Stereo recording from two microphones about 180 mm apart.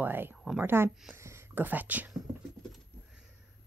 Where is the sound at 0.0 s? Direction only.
10° right (ahead or behind).